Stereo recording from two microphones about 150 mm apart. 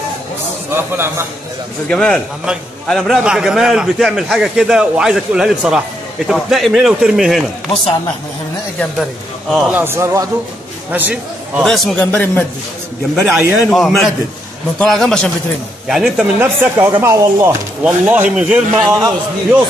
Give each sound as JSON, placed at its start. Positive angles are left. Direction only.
{"t": 0.7, "sound": "speech", "side_deg": -15}
{"t": 1.9, "sound": "a man's voice", "side_deg": 5}
{"t": 9.5, "sound": "a man's voice", "side_deg": 0}
{"t": 9.8, "sound": "a man's voice", "side_deg": -15}
{"t": 11.6, "sound": "a man's voice", "side_deg": 0}
{"t": 12.0, "sound": "speech", "side_deg": 10}
{"t": 13.3, "sound": "speech", "side_deg": -15}
{"t": 13.7, "sound": "a man's voice", "side_deg": 0}
{"t": 16.3, "sound": "speech", "side_deg": -15}